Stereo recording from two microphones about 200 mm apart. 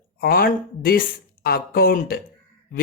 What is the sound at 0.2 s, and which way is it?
A woman's voice, 45° left (ahead or behind).